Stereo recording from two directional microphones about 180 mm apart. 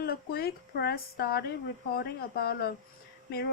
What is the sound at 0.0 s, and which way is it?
Speech, 60° left (ahead or behind).